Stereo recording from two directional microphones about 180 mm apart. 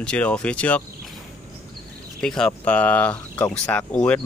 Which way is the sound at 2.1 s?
5° left (ahead or behind).